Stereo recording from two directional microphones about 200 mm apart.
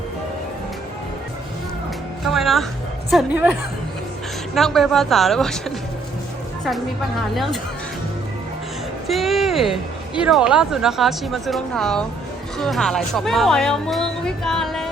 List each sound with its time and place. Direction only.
2.2 s speech: centre (ahead or behind)
4.5 s speech: centre (ahead or behind)
7.3 s speech: centre (ahead or behind)
9.0 s speech: centre (ahead or behind)